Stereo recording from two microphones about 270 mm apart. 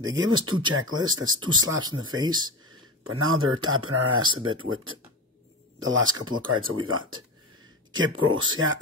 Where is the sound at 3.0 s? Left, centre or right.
Right.